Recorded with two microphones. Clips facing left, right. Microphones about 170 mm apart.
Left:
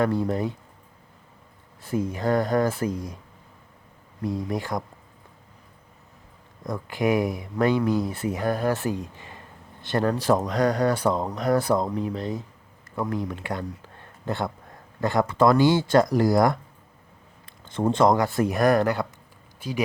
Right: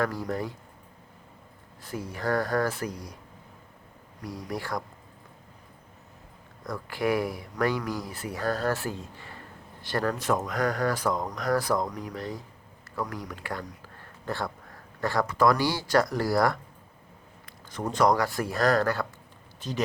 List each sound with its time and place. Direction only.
0.0 s speech: 25° left (ahead or behind)
1.9 s speech: 20° left (ahead or behind)
4.2 s speech: 25° left (ahead or behind)
6.7 s speech: 20° left (ahead or behind)